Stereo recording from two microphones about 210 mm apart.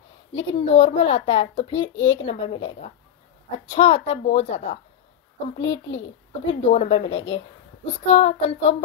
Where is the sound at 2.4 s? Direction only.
25° left (ahead or behind).